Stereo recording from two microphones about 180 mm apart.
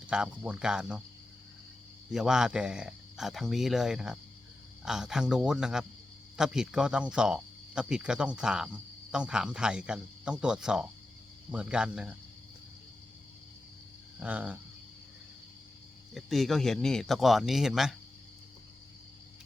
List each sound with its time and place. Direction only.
0.1 s speech: 5° right (ahead or behind)
2.1 s a man's voice: 5° right (ahead or behind)
14.2 s a man's voice: 10° right (ahead or behind)
16.1 s speech: centre (ahead or behind)